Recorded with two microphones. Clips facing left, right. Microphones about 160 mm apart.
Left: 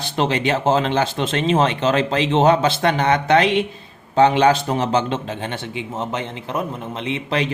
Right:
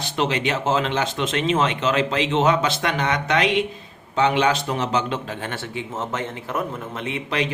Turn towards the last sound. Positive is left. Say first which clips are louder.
# left 3 dB
turn(degrees=25)  # may be behind; listen again after turning